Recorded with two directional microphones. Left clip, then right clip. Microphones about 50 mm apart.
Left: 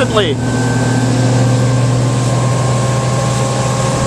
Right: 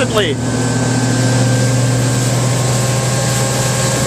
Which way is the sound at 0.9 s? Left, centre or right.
Left.